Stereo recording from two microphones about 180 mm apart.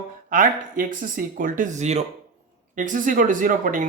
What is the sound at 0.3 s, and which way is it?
Speech, 50° right (ahead or behind).